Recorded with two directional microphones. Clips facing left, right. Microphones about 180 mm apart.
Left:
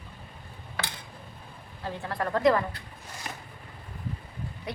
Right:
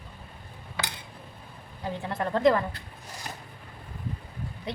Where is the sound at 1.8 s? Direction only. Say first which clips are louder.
Right 1 dB; 20° right (ahead or behind).